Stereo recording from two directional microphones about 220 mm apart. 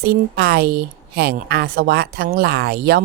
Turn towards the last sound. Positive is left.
turn(degrees=-45)  # may be behind; listen again after turning